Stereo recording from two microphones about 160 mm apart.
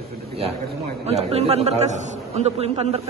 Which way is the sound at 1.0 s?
40° right (ahead or behind).